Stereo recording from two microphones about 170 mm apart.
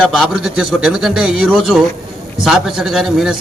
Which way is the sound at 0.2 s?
Centre (ahead or behind).